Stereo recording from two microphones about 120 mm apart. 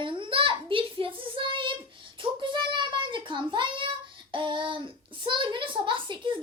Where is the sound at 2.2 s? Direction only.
40° right (ahead or behind).